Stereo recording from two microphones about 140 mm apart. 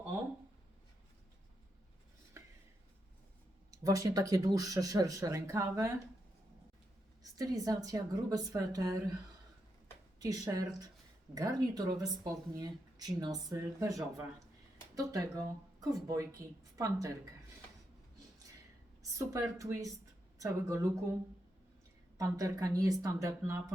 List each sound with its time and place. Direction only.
2.4 s a sound: 20° right (ahead or behind)
3.7 s speech: 25° right (ahead or behind)
7.2 s speech: 25° right (ahead or behind)
10.2 s speech: 25° right (ahead or behind)
19.3 s speech: 25° right (ahead or behind)
22.2 s speech: 25° right (ahead or behind)